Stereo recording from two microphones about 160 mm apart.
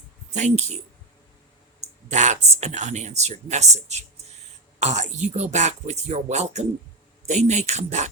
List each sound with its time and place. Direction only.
0.3 s speech: 45° right (ahead or behind)
2.0 s speech: 50° right (ahead or behind)